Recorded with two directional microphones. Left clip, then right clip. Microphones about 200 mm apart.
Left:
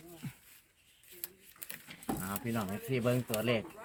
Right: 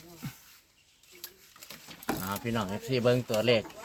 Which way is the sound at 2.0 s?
50° right (ahead or behind).